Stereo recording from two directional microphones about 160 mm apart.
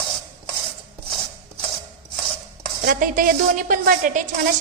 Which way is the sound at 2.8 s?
60° right (ahead or behind).